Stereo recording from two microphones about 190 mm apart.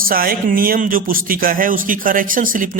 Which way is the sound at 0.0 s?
50° right (ahead or behind).